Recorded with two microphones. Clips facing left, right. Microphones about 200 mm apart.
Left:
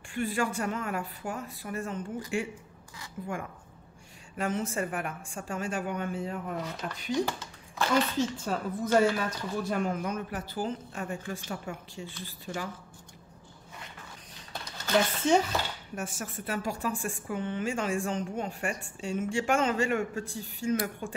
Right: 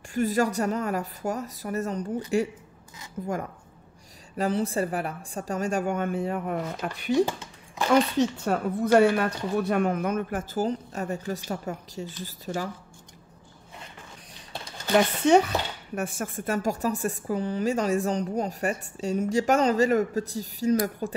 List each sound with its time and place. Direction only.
0.1 s a woman's voice: 40° right (ahead or behind)
3.2 s a woman's voice: 40° right (ahead or behind)
4.4 s speech: 35° right (ahead or behind); by 7.2 s 60° right (ahead or behind)
8.2 s speech: 60° right (ahead or behind); by 12.6 s 40° right (ahead or behind)
15.1 s a woman's voice: 65° right (ahead or behind); by 21.1 s 35° right (ahead or behind)